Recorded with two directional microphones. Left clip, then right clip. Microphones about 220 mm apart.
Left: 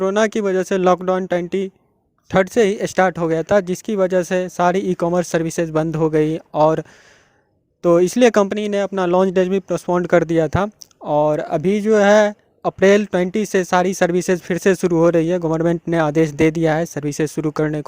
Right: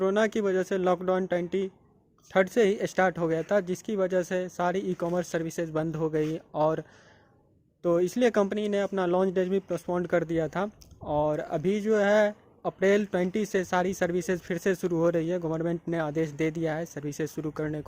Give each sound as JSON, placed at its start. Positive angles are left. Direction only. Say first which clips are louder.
{"t": 0.0, "sound": "speech", "louder": "left 8 dB", "side_deg": 40}